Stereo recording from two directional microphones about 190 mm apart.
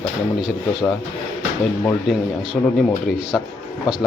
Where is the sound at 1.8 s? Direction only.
5° left (ahead or behind).